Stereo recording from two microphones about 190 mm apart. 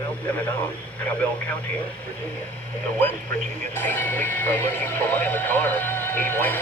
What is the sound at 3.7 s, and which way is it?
Speech, 10° left (ahead or behind).